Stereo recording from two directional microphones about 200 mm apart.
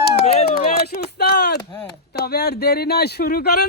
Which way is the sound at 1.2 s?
55° left (ahead or behind).